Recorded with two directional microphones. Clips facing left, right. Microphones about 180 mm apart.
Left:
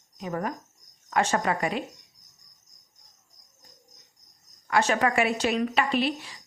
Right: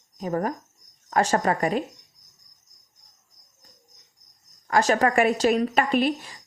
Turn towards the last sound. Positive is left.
turn(degrees=-50)  # may be behind; listen again after turning